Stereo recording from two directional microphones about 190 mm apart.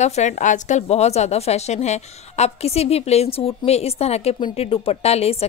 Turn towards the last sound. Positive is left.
turn(degrees=30)  # may be behind; listen again after turning